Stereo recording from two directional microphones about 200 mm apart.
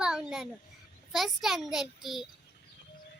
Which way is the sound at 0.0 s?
5° right (ahead or behind).